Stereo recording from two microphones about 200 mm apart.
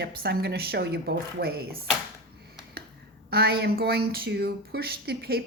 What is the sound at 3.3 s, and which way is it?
Speech, 55° right (ahead or behind).